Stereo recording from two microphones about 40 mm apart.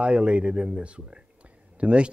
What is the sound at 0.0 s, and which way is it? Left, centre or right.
Speech, right.